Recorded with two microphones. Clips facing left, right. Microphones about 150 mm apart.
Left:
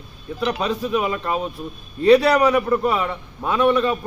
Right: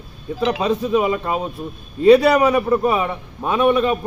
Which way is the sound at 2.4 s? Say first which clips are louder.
Right 1 dB; 20° right (ahead or behind).